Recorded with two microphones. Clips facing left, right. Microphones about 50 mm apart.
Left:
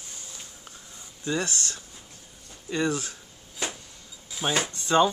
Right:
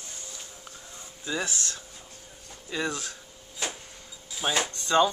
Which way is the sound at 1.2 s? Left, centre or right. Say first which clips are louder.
Left 3 dB; centre.